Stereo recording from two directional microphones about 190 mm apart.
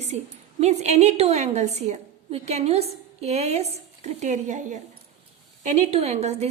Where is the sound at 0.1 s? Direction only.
35° right (ahead or behind).